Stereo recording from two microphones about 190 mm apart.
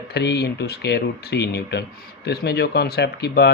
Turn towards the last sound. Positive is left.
turn(degrees=60)  # may be behind; listen again after turning